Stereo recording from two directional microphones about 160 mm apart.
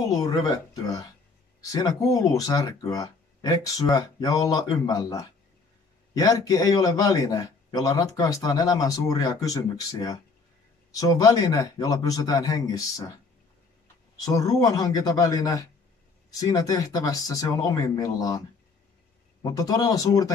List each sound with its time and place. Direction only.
0.0 s a man's voice: 20° left (ahead or behind)
14.2 s a man's voice: 20° left (ahead or behind)
19.4 s a man's voice: 25° left (ahead or behind)